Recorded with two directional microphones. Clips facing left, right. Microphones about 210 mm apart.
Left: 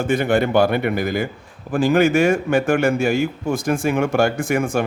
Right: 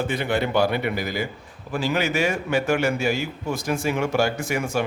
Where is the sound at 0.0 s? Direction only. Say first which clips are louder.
Left 6 dB; 50° left (ahead or behind).